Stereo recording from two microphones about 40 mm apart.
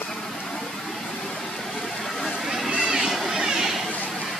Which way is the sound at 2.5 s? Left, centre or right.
Centre.